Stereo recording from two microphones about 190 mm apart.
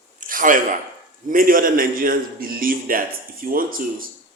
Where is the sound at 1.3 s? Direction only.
50° right (ahead or behind).